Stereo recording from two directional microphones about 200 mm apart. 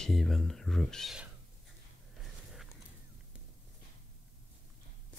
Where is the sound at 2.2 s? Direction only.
Centre (ahead or behind).